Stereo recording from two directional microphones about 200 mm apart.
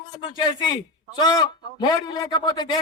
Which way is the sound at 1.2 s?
20° left (ahead or behind).